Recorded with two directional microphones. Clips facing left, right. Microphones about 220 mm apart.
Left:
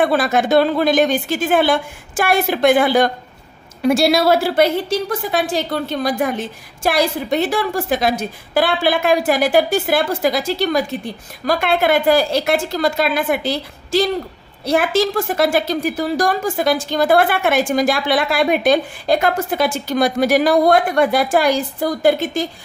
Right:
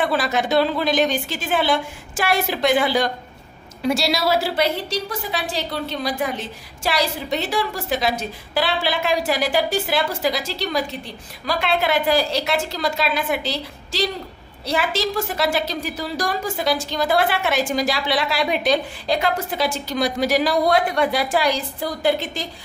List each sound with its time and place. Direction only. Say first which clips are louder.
0.0 s a woman's voice: left 5 dB; 50° left (ahead or behind)